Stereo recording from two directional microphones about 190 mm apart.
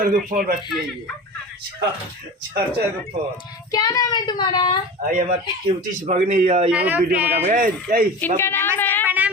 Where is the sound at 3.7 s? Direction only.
20° left (ahead or behind).